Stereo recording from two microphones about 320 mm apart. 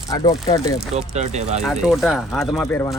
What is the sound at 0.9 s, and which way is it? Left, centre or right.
Speech, centre.